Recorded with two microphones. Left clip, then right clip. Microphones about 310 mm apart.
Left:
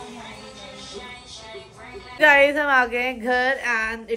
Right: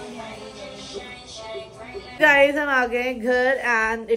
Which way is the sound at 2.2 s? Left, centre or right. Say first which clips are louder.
Left 1 dB; centre.